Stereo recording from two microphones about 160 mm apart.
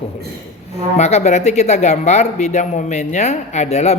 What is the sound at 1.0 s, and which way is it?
A man's voice, 45° left (ahead or behind).